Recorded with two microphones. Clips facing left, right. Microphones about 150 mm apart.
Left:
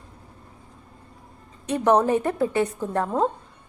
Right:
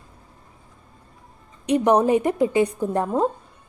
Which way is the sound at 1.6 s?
15° right (ahead or behind).